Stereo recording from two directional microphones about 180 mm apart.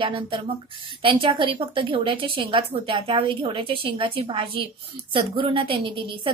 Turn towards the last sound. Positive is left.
turn(degrees=-30)  # may be behind; listen again after turning